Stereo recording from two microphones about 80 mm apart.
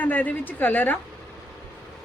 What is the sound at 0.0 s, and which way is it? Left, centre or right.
Speech, left.